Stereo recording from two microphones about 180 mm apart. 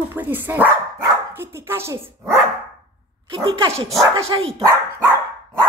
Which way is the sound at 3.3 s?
30° right (ahead or behind).